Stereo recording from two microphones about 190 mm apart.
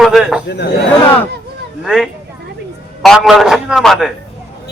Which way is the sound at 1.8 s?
Centre (ahead or behind).